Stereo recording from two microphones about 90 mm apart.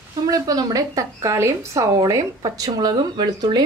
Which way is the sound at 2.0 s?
40° right (ahead or behind).